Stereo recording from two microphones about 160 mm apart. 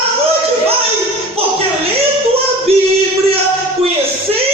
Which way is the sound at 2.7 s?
40° right (ahead or behind).